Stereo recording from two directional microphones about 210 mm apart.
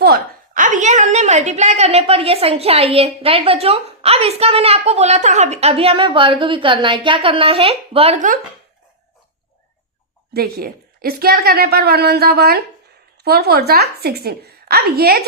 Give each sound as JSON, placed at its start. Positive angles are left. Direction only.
{"t": 0.0, "sound": "a woman's voice", "side_deg": -45}
{"t": 10.3, "sound": "a woman's voice", "side_deg": -45}